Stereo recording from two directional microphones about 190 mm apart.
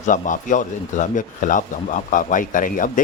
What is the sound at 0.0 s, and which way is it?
Speech, 40° left (ahead or behind).